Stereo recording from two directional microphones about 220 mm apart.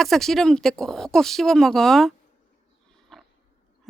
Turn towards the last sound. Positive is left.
turn(degrees=0)  # may be behind; listen again after turning